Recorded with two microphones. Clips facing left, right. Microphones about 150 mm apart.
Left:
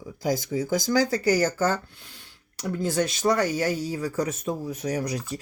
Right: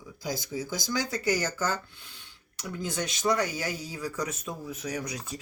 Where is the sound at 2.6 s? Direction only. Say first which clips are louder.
Left 8 dB; 35° left (ahead or behind).